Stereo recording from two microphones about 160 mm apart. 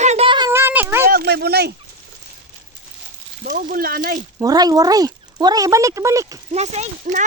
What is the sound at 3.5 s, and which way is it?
Speech, 60° right (ahead or behind).